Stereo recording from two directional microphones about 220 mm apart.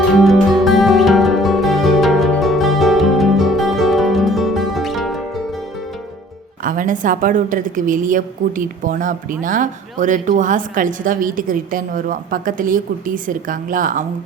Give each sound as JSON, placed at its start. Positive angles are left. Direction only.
{"t": 0.2, "sound": "music", "side_deg": 0}
{"t": 6.6, "sound": "a woman's voice", "side_deg": -35}